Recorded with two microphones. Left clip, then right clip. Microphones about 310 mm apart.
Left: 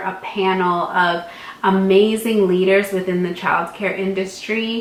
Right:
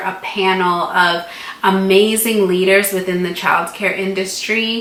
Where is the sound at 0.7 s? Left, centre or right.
Centre.